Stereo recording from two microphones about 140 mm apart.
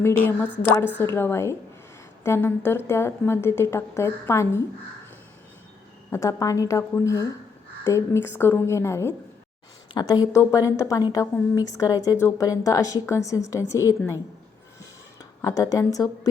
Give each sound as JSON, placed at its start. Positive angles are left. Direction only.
{"t": 0.3, "sound": "a woman's voice", "side_deg": 15}
{"t": 6.1, "sound": "a woman's voice", "side_deg": 20}
{"t": 9.9, "sound": "a woman's voice", "side_deg": 30}
{"t": 15.4, "sound": "a woman's voice", "side_deg": 20}